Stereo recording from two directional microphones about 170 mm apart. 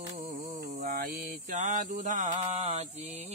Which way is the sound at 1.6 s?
45° right (ahead or behind).